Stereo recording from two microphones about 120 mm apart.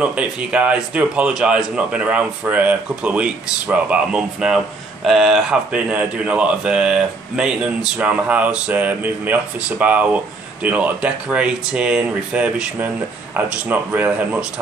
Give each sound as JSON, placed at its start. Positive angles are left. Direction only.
{"t": 0.0, "sound": "speech", "side_deg": -10}